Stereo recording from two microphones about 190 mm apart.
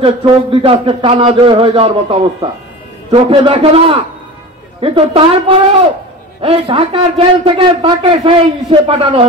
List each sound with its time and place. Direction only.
0.0 s a man's voice: 25° right (ahead or behind)